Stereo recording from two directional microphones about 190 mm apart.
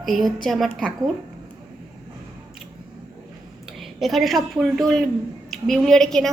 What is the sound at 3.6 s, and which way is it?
A woman's voice, centre (ahead or behind).